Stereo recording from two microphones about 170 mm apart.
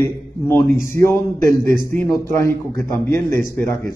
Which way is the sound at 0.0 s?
15° left (ahead or behind).